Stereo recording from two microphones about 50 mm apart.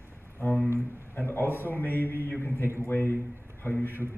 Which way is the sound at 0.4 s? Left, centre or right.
Left.